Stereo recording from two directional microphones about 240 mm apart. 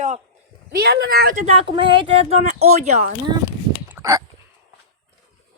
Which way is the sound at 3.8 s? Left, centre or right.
Centre.